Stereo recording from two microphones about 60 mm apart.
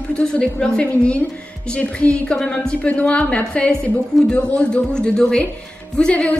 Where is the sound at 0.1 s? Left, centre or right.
Centre.